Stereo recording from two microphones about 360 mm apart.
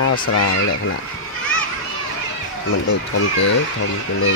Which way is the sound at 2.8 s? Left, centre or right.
Left.